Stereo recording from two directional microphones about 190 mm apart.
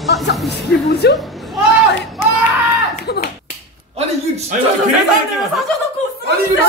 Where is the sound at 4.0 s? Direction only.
35° right (ahead or behind).